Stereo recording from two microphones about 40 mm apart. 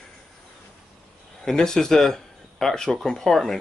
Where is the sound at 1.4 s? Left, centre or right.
Centre.